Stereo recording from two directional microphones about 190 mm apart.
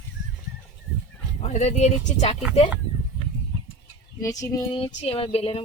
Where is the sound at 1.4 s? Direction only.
40° left (ahead or behind).